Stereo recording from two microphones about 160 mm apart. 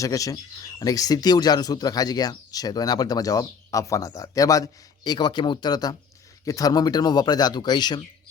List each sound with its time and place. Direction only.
0.0 s speech: 20° left (ahead or behind)